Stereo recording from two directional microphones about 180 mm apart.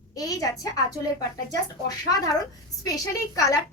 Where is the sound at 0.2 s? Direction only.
20° left (ahead or behind).